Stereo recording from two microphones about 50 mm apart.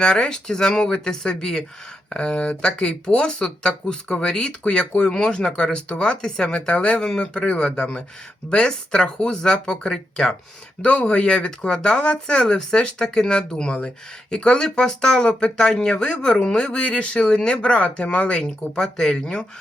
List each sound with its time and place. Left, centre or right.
0.0 s speech: centre